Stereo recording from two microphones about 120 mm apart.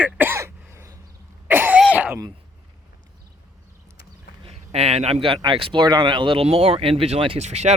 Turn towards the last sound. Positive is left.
turn(degrees=-65)  # may be behind; listen again after turning